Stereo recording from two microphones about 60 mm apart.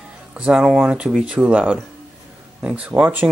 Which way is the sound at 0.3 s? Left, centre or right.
Centre.